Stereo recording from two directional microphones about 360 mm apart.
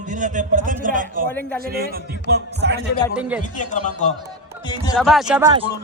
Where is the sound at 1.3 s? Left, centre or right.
Centre.